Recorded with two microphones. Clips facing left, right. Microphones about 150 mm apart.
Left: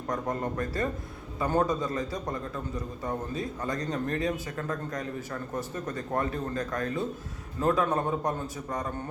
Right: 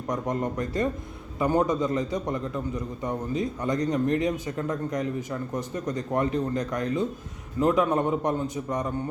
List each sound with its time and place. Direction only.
0.1 s speech: 20° right (ahead or behind)